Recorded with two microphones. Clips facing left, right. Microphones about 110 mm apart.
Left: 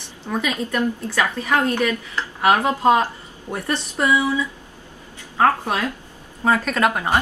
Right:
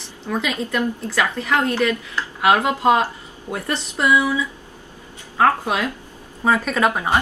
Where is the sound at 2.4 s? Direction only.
5° right (ahead or behind).